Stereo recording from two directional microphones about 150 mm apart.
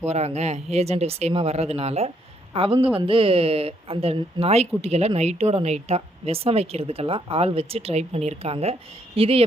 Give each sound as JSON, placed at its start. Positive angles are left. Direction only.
{"t": 0.0, "sound": "speech", "side_deg": -45}